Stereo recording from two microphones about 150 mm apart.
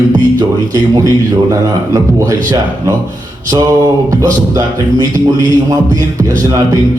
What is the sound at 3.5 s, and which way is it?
Speech, 20° right (ahead or behind).